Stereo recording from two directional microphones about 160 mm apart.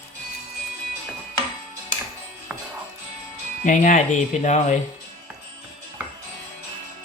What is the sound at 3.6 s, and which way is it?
Speech, 50° left (ahead or behind).